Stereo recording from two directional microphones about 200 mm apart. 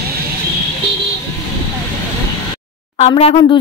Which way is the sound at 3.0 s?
30° left (ahead or behind).